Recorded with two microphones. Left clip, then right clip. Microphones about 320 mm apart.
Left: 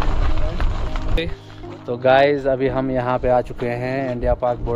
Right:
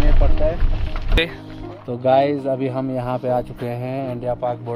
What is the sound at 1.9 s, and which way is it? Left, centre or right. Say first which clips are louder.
Speech: left 2 dB; right.